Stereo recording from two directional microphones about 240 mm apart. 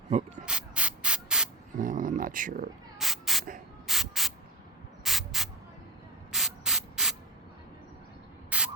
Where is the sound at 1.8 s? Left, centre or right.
Right.